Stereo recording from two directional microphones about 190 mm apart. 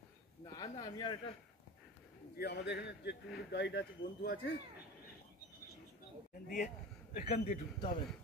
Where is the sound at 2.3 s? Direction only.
60° left (ahead or behind).